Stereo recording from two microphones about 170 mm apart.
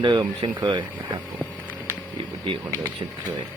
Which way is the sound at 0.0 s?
25° right (ahead or behind).